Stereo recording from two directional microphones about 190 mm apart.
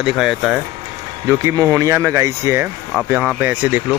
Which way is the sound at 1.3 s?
15° right (ahead or behind).